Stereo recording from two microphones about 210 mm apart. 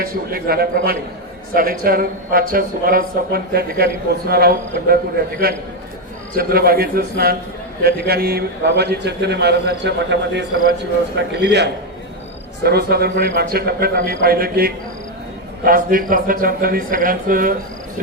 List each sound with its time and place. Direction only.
0.0 s a man's voice: 45° right (ahead or behind)